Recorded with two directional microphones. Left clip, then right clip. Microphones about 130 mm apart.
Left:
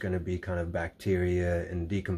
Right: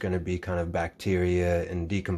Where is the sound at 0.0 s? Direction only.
30° right (ahead or behind).